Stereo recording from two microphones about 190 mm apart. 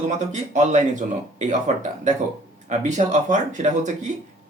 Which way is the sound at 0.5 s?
40° right (ahead or behind).